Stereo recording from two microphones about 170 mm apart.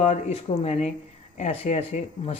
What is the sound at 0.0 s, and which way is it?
Speech, 40° left (ahead or behind).